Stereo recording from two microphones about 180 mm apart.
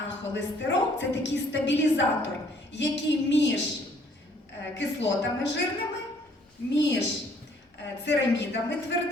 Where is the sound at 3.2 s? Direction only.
80° left.